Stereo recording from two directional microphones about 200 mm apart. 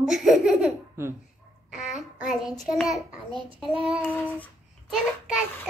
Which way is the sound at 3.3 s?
25° right (ahead or behind).